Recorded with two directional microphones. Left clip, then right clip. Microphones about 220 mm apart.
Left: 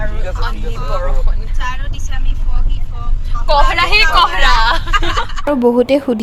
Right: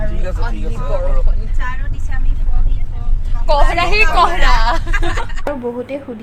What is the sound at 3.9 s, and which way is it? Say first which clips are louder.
Speech: left 1 dB; 15° right (ahead or behind).